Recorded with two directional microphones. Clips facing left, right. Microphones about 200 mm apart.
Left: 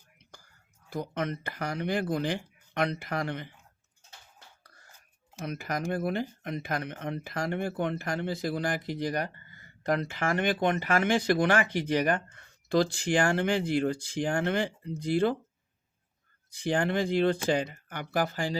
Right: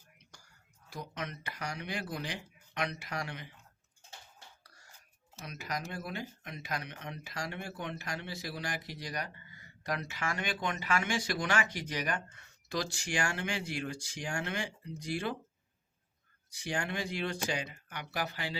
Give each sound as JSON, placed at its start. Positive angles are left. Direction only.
{"t": 0.9, "sound": "speech", "side_deg": 55}
{"t": 5.5, "sound": "speech", "side_deg": 55}
{"t": 16.6, "sound": "speech", "side_deg": 55}